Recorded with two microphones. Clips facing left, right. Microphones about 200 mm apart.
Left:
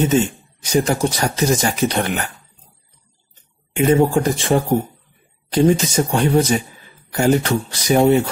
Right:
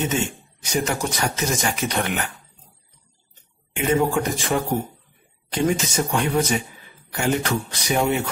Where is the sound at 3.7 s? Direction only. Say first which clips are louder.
Left 6 dB; 35° left (ahead or behind).